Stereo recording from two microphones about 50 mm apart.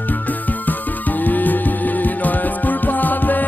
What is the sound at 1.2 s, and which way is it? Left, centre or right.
Music, left.